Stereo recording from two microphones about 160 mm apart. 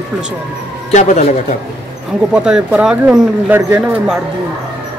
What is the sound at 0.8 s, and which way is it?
Speech, 45° left (ahead or behind).